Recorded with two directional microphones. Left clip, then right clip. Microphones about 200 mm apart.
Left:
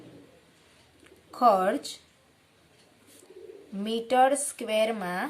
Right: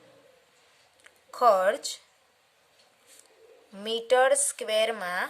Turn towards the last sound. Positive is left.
turn(degrees=-40)  # may be behind; listen again after turning